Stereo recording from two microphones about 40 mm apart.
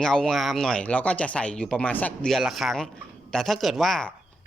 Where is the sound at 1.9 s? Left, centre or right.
Left.